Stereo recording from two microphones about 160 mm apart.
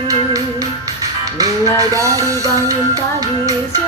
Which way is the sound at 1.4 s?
20° right (ahead or behind).